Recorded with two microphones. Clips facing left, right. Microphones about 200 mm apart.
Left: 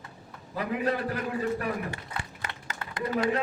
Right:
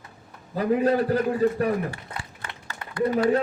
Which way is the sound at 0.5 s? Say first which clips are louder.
Right 8 dB; 35° right (ahead or behind).